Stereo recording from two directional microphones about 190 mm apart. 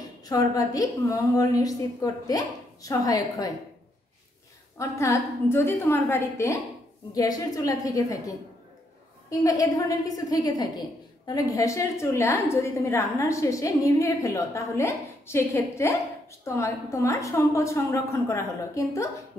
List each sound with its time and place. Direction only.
0.2 s a woman's voice: 20° left (ahead or behind)
4.7 s a woman's voice: 15° left (ahead or behind)